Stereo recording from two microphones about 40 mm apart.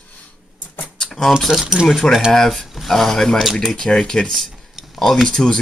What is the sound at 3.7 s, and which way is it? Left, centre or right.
Speech, left.